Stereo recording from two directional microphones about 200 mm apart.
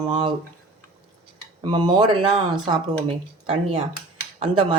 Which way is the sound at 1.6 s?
20° right (ahead or behind).